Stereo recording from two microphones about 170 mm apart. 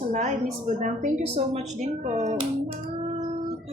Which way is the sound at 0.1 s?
50° right (ahead or behind).